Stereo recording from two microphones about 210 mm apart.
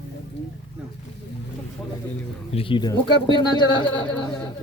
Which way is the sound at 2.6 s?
25° left (ahead or behind).